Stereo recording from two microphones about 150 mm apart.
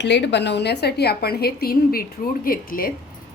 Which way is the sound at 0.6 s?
90° left.